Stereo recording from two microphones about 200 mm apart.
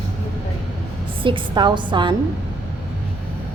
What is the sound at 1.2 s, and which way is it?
Speech, 25° right (ahead or behind).